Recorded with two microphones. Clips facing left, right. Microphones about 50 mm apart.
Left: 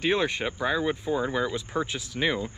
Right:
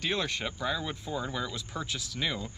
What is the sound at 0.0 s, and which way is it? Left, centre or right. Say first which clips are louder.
Speech: left 6 dB; left.